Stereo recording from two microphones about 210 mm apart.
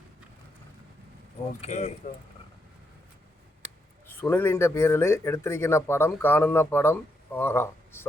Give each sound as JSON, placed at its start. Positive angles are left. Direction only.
{"t": 1.6, "sound": "speech", "side_deg": 30}
{"t": 4.2, "sound": "speech", "side_deg": 10}